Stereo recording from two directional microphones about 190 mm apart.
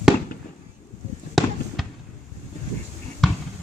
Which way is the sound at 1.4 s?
Centre (ahead or behind).